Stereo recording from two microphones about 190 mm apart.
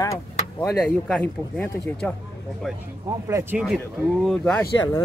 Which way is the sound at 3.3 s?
10° right (ahead or behind).